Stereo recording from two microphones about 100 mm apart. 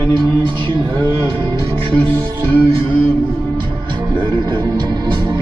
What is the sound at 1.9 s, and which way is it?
Music, 20° left (ahead or behind).